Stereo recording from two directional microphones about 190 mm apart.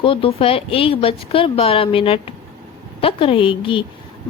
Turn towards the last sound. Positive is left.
turn(degrees=25)  # may be behind; listen again after turning